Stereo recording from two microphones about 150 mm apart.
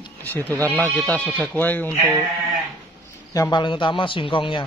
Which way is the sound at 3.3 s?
25° left (ahead or behind).